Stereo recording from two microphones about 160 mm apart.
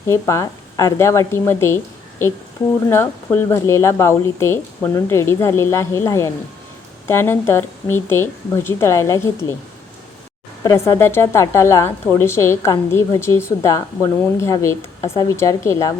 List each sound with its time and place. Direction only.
0.1 s a woman's voice: 15° left (ahead or behind)
10.6 s a woman's voice: 20° left (ahead or behind)